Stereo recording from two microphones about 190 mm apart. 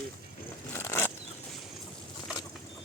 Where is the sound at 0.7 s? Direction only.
10° left (ahead or behind).